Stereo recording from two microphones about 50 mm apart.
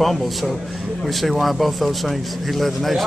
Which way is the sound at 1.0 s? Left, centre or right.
Centre.